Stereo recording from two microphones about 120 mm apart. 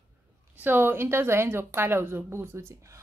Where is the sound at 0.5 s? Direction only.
15° right (ahead or behind).